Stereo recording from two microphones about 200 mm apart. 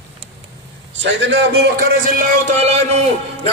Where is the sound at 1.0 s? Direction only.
60° right (ahead or behind).